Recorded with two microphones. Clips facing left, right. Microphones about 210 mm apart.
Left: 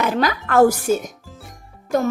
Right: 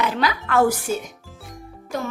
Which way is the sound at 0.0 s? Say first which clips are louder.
Left 3 dB; 45° left (ahead or behind).